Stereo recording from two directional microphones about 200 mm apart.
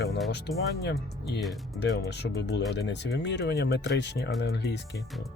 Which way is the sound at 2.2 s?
55° left (ahead or behind).